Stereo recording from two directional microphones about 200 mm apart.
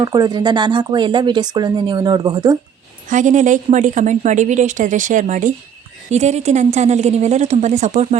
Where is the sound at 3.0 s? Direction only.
40° right (ahead or behind).